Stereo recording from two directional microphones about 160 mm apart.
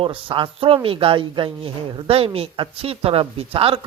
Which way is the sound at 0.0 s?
35° right (ahead or behind).